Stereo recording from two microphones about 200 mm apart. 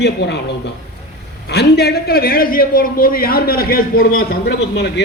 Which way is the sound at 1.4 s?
55° left (ahead or behind).